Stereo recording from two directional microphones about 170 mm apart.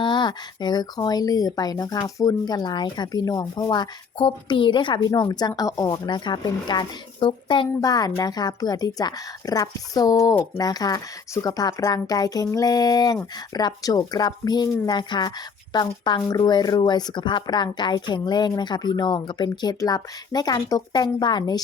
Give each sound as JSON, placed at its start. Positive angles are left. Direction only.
{"t": 0.0, "sound": "speech", "side_deg": 25}